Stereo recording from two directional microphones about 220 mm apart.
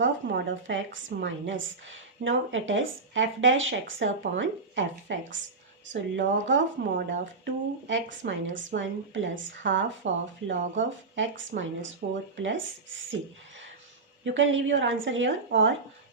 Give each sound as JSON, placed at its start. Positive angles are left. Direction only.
{"t": 0.0, "sound": "a woman's voice", "side_deg": -55}
{"t": 14.3, "sound": "a woman's voice", "side_deg": -60}